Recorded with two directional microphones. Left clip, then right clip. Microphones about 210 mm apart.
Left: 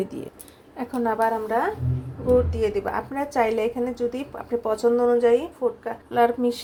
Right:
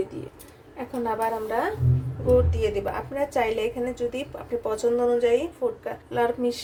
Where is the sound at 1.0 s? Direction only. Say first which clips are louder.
Left 4 dB; 25° left (ahead or behind).